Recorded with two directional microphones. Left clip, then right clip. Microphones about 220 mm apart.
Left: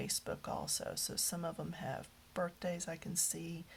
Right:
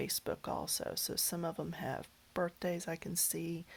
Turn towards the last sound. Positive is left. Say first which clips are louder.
# right 2 dB
turn(degrees=-35)  # may be behind; listen again after turning